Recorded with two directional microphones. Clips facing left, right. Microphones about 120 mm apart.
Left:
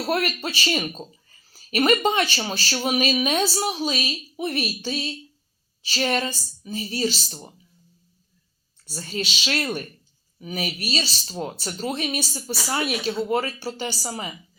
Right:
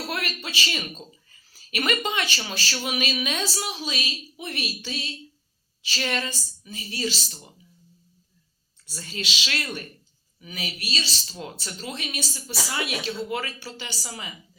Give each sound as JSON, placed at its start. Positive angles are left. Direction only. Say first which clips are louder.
{"t": 0.1, "sound": "speech", "louder": "left 7 dB", "side_deg": 40}
{"t": 8.9, "sound": "speech", "louder": "left 5 dB", "side_deg": 35}